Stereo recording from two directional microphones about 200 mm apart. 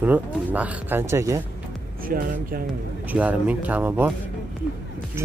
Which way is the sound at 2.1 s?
45° right (ahead or behind).